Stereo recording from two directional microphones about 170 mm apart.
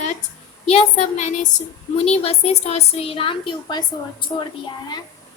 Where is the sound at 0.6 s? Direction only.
40° left (ahead or behind).